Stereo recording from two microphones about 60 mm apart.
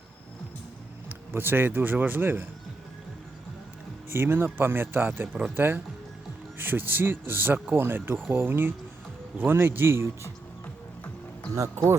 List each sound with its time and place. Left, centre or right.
1.3 s a man's voice: right
4.1 s a man's voice: right
11.5 s speech: right